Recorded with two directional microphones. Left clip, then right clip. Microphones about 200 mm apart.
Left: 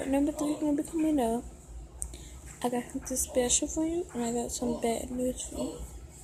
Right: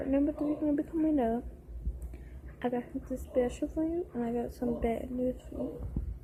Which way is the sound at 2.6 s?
25° left (ahead or behind).